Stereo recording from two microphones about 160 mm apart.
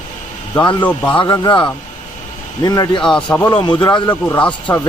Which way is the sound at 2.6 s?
25° left (ahead or behind).